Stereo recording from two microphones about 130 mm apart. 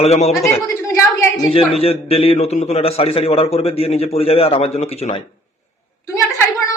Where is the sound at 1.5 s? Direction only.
45° left (ahead or behind).